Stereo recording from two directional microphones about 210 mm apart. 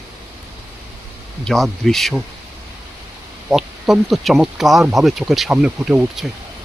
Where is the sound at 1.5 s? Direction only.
Centre (ahead or behind).